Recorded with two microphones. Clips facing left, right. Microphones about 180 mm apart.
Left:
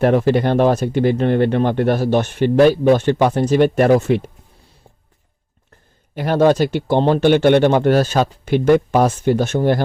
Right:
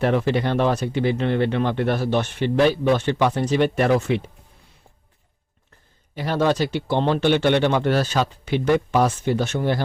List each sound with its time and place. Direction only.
0.0 s speech: 45° left (ahead or behind)
6.1 s speech: 50° left (ahead or behind)